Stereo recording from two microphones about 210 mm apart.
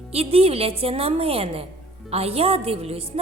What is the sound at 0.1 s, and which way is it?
Speech, 30° right (ahead or behind).